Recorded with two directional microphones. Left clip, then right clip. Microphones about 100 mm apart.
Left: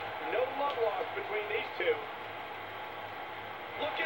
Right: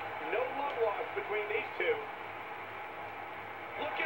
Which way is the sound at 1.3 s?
20° right (ahead or behind).